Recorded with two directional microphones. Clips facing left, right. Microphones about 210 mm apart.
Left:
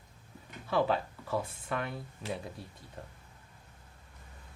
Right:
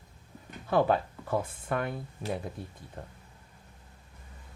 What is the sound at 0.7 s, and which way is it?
Speech, 50° right (ahead or behind).